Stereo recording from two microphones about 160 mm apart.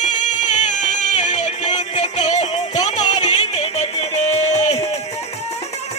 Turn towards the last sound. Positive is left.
turn(degrees=45)  # may be behind; listen again after turning